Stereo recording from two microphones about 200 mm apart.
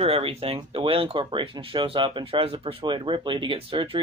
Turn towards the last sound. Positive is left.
turn(degrees=-25)  # may be behind; listen again after turning